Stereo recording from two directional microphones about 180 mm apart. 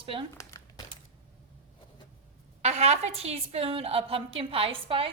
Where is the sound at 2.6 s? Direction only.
35° right (ahead or behind).